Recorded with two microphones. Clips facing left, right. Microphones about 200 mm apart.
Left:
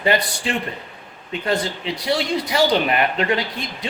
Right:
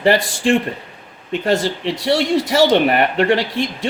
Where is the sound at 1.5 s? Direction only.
90° right.